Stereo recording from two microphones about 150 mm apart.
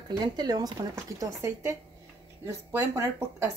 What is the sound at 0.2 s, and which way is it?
Speech, 25° right (ahead or behind).